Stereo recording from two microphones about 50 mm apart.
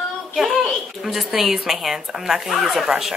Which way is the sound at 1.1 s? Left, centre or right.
Centre.